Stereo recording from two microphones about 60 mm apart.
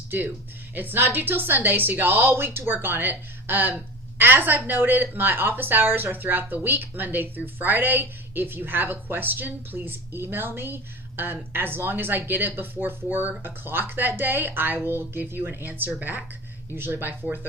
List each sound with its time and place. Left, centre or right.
0.8 s a woman's voice: right